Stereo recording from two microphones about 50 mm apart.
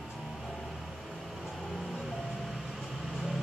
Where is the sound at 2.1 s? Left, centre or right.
Centre.